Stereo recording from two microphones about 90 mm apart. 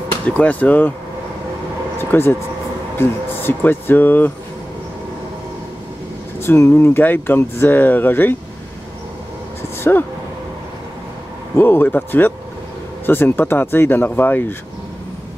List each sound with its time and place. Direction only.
0.4 s speech: 20° left (ahead or behind)
2.0 s speech: 25° left (ahead or behind)
6.4 s speech: 25° left (ahead or behind)
9.8 s a sound: 25° left (ahead or behind)
11.5 s speech: 25° left (ahead or behind)